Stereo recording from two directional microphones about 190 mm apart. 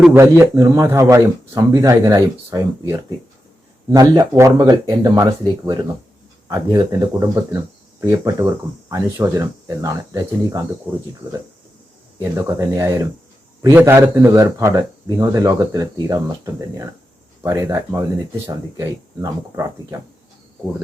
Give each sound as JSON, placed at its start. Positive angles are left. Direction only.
{"t": 0.2, "sound": "a man's voice", "side_deg": -15}
{"t": 12.5, "sound": "a man's voice", "side_deg": -15}